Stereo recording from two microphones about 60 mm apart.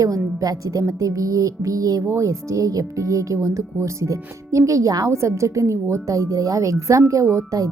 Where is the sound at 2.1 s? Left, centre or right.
Right.